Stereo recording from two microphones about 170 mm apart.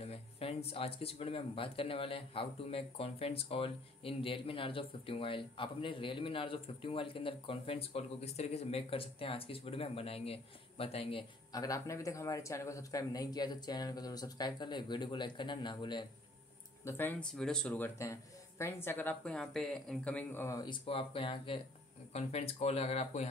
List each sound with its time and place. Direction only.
0.0 s speech: 35° left (ahead or behind)
11.5 s speech: 20° left (ahead or behind)
16.8 s speech: 10° left (ahead or behind)
20.8 s speech: 35° left (ahead or behind)